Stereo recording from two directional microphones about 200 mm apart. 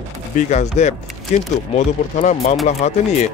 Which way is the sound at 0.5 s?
35° left (ahead or behind).